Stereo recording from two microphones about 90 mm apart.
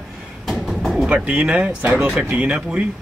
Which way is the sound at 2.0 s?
Centre (ahead or behind).